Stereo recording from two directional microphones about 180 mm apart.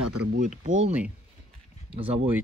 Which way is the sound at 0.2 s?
55° right (ahead or behind).